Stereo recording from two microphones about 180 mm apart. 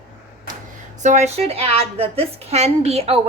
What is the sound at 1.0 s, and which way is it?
A woman's voice, 40° right (ahead or behind).